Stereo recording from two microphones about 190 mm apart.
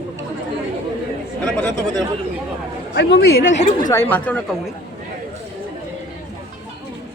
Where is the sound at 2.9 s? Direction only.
65° left (ahead or behind).